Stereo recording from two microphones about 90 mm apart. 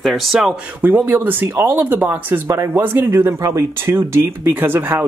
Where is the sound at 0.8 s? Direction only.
20° right (ahead or behind).